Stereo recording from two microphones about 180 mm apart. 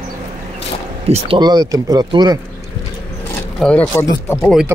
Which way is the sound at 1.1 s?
30° right (ahead or behind).